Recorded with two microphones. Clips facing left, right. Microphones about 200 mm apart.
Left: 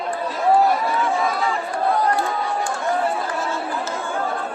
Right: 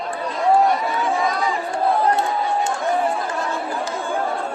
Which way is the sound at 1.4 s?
20° right (ahead or behind).